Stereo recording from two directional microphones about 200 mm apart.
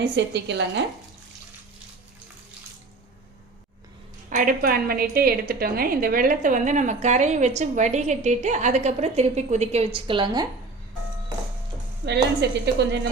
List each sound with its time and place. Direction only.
0.0 s a woman's voice: 60° right (ahead or behind)
4.3 s a woman's voice: 40° right (ahead or behind); by 10.4 s 25° right (ahead or behind)
12.0 s a woman's voice: 60° right (ahead or behind)